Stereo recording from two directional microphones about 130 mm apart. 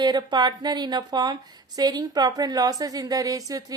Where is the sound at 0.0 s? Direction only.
35° right (ahead or behind).